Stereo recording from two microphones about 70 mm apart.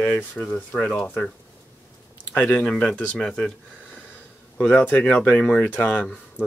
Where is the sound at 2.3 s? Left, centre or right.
Left.